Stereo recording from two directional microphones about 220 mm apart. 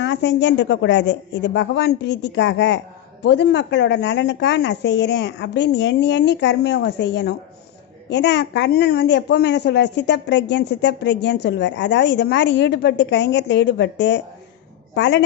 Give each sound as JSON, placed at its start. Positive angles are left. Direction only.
{"t": 0.0, "sound": "a woman's voice", "side_deg": 55}